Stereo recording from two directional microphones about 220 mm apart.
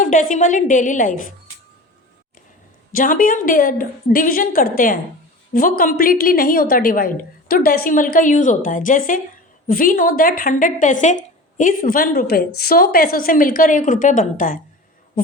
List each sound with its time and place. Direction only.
0.0 s a woman's voice: 35° left (ahead or behind)
2.9 s a woman's voice: 40° left (ahead or behind)